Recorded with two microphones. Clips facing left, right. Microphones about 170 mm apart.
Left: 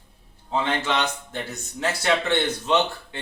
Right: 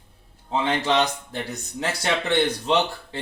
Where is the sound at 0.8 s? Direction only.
35° right (ahead or behind).